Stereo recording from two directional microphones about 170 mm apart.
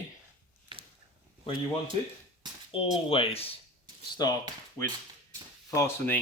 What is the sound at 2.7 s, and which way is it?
Speech, 30° left (ahead or behind).